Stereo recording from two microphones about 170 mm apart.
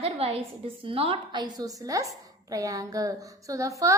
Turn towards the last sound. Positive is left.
turn(degrees=-20)  # may be behind; listen again after turning